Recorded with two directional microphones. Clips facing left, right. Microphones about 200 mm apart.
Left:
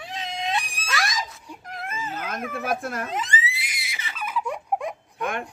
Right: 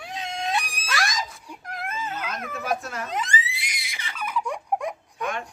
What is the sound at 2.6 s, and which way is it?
Speech, 55° left (ahead or behind).